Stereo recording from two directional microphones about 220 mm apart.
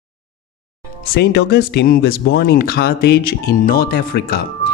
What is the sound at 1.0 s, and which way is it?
Speech, 45° left (ahead or behind).